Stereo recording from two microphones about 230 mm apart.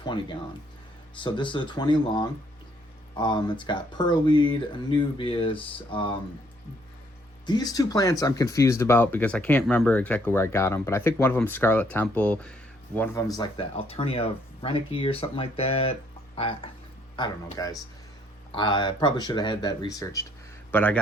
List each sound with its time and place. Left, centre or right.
0.0 s speech: left
7.4 s speech: centre